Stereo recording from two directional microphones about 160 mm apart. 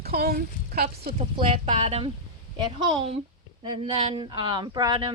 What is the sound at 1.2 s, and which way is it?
Speech, 40° right (ahead or behind).